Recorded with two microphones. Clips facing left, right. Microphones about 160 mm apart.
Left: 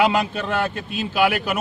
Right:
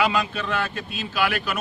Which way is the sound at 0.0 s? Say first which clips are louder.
Left 4 dB; 35° left (ahead or behind).